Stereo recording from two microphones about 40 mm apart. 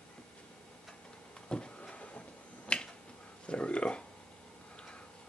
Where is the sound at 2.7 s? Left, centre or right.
Left.